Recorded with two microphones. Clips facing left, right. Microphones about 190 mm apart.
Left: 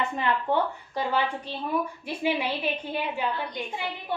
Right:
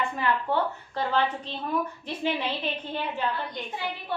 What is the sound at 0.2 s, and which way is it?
A woman's voice, 15° left (ahead or behind).